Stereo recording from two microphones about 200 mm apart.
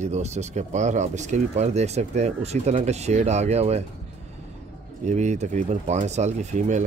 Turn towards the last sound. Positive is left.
turn(degrees=-40)  # may be behind; listen again after turning